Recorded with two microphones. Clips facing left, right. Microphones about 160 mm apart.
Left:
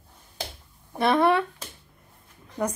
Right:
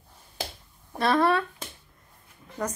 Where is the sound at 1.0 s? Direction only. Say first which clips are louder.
Left 2 dB; 15° left (ahead or behind).